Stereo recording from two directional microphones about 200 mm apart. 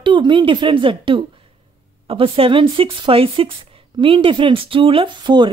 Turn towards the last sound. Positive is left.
turn(degrees=-20)  # may be behind; listen again after turning